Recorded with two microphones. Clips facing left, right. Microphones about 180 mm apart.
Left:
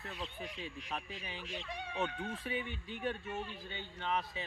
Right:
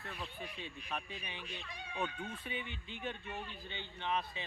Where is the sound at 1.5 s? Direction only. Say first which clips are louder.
Left 5 dB; 75° left (ahead or behind).